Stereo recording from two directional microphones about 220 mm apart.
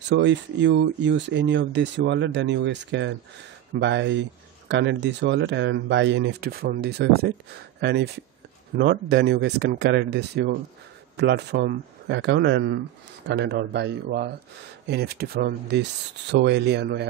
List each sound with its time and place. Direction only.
0.0 s speech: 55° right (ahead or behind)